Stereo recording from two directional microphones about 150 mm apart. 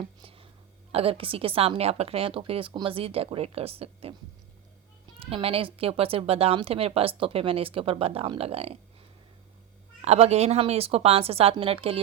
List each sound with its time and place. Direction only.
0.2 s a sound: 40° right (ahead or behind)
0.9 s speech: 40° right (ahead or behind)
5.2 s speech: 40° right (ahead or behind)
10.0 s speech: 45° right (ahead or behind)